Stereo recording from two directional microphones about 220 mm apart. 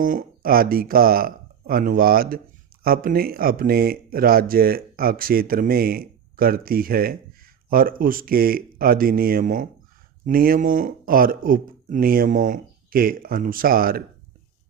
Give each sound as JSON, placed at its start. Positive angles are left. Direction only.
{"t": 0.0, "sound": "speech", "side_deg": -40}